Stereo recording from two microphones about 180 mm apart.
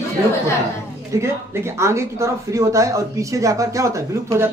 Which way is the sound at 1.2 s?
15° right (ahead or behind).